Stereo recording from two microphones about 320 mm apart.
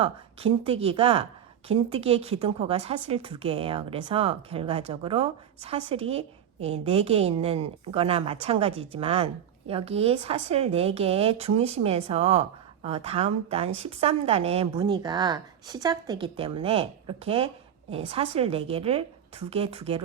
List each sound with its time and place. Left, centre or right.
0.0 s a woman's voice: centre